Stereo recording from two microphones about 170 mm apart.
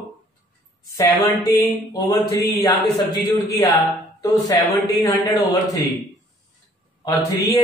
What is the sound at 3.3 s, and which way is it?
Speech, 20° left (ahead or behind).